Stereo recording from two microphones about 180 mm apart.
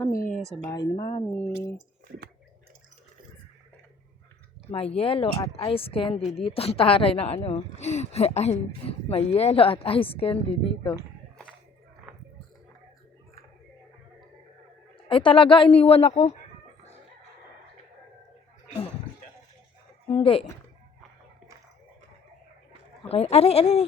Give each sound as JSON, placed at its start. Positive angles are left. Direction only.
{"t": 0.1, "sound": "speech", "side_deg": 50}
{"t": 0.6, "sound": "speech", "side_deg": 20}
{"t": 2.0, "sound": "a sound", "side_deg": -60}
{"t": 4.9, "sound": "a woman's voice", "side_deg": 30}
{"t": 15.1, "sound": "a woman's voice", "side_deg": 30}
{"t": 20.1, "sound": "a woman's voice", "side_deg": 30}
{"t": 23.0, "sound": "a woman's voice", "side_deg": 35}